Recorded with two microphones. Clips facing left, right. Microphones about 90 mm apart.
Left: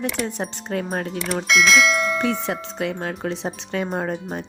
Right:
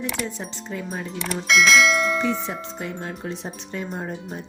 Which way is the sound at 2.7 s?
90° left.